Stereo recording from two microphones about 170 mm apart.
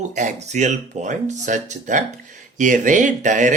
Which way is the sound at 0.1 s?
45° right (ahead or behind).